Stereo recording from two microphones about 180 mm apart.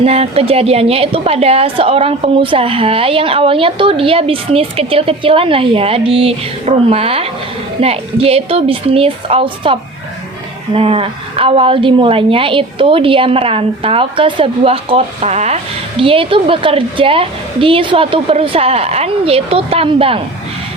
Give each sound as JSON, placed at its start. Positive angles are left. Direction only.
{"t": 0.0, "sound": "a woman's voice", "side_deg": -35}
{"t": 10.8, "sound": "a woman's voice", "side_deg": -30}